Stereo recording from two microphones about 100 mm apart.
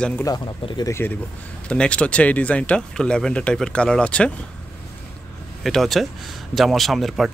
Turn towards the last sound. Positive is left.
turn(degrees=0)  # may be behind; listen again after turning